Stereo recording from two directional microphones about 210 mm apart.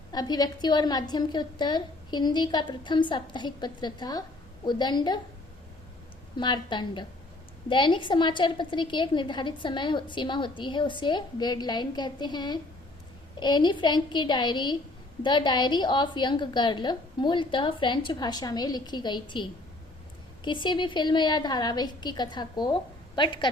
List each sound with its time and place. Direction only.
0.1 s a woman's voice: 20° left (ahead or behind)
6.3 s a woman's voice: 20° left (ahead or behind)